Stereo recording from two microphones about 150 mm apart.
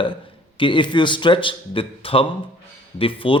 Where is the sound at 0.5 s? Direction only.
35° left (ahead or behind).